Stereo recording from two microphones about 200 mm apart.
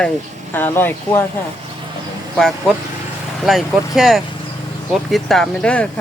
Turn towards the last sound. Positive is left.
turn(degrees=5)  # may be behind; listen again after turning